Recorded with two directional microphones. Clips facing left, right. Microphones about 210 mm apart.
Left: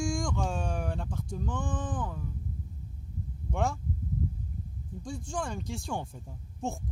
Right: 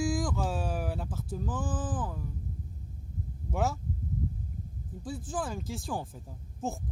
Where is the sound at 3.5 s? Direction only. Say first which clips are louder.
Even; 5° right (ahead or behind).